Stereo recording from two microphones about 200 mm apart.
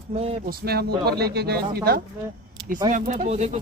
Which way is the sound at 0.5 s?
50° right (ahead or behind).